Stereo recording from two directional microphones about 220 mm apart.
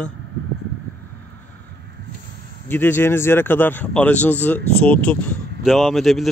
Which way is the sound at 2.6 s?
10° left (ahead or behind).